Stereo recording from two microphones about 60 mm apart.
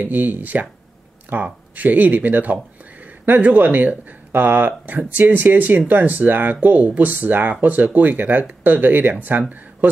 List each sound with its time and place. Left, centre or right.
0.0 s speech: right